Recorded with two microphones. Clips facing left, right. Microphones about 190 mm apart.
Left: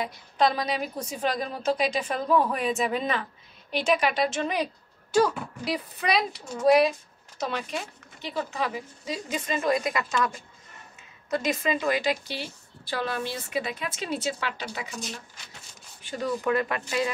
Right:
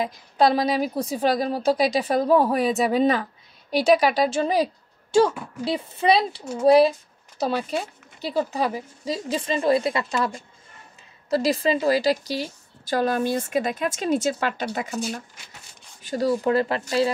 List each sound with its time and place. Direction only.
0.0 s a woman's voice: 35° right (ahead or behind)
16.0 s a woman's voice: 40° right (ahead or behind)